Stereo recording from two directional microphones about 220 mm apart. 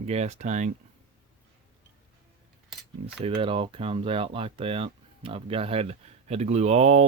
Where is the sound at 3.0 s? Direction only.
25° right (ahead or behind).